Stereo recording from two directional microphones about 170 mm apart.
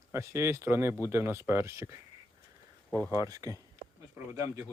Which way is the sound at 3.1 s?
20° right (ahead or behind).